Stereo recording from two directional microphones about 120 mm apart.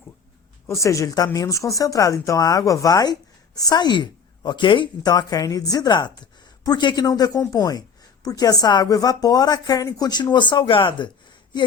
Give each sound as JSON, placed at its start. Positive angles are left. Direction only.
{"t": 0.7, "sound": "speech", "side_deg": 25}